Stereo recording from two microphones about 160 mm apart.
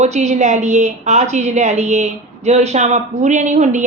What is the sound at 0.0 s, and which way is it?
A woman's voice, 45° right (ahead or behind).